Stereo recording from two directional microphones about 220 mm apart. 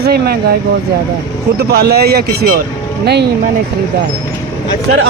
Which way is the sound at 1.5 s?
45° right (ahead or behind).